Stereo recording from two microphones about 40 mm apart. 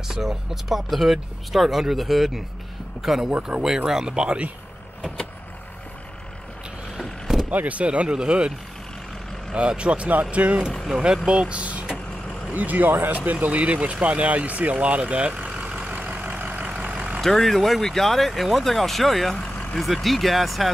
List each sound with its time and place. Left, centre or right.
0.1 s speech: centre
7.0 s vehicle: centre
7.5 s speech: right
9.6 s speech: right
11.2 s speech: right
12.5 s speech: right
15.6 s vehicle: right
16.3 s vehicle: right
16.8 s vehicle: right
17.2 s speech: centre